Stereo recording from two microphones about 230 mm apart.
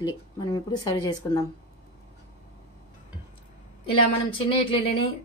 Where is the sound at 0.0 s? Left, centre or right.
Centre.